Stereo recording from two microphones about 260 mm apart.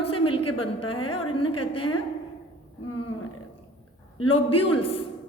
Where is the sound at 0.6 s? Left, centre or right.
Left.